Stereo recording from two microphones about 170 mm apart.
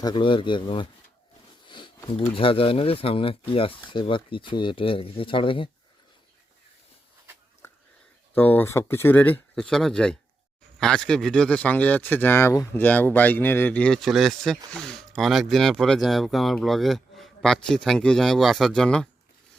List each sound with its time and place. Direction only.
0.0 s speech: 30° left (ahead or behind)
1.6 s sniff: 30° left (ahead or behind)
2.0 s speech: 30° left (ahead or behind)
8.4 s speech: 10° left (ahead or behind)